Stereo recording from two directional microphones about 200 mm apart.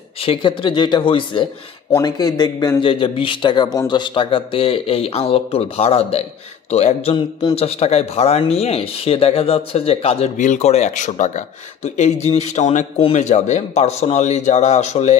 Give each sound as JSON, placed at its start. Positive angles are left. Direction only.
{"t": 0.2, "sound": "a man's voice", "side_deg": 25}